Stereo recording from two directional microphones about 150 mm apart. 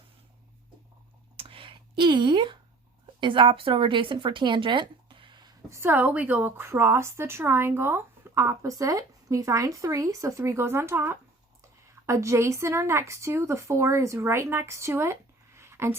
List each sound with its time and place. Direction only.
1.4 s a sound: 35° right (ahead or behind)
3.2 s a woman's voice: 35° right (ahead or behind)
5.8 s a woman's voice: 10° right (ahead or behind)